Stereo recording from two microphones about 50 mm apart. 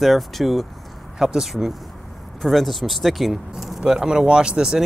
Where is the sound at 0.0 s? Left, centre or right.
Centre.